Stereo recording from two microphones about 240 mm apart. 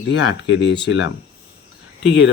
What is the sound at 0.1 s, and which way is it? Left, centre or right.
Speech, left.